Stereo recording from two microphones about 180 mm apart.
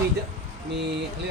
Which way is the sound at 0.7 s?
70° right (ahead or behind).